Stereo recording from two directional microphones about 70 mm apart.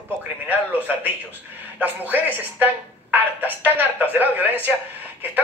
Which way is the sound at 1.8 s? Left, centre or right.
Right.